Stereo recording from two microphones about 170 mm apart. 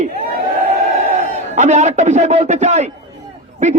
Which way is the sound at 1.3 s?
45° right (ahead or behind).